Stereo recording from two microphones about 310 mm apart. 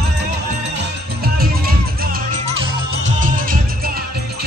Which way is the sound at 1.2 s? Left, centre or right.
Right.